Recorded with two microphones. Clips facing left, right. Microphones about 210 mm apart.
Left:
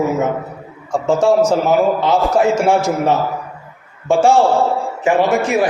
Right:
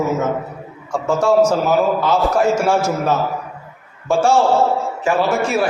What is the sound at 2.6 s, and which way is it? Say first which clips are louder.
Speech: left 2 dB; 15° left (ahead or behind).